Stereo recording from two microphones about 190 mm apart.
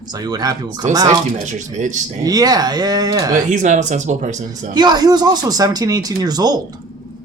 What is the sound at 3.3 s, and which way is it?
Speech, 40° right (ahead or behind).